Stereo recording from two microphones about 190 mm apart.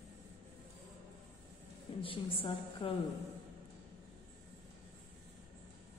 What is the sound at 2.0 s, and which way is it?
Speech, 30° left (ahead or behind).